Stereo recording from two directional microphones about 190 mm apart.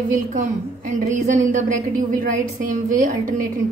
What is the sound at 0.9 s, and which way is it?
A woman's voice, 40° right (ahead or behind).